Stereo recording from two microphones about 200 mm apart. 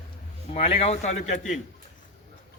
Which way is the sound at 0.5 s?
30° left (ahead or behind).